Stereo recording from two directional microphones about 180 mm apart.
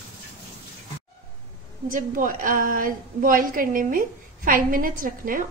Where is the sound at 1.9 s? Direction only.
50° right (ahead or behind).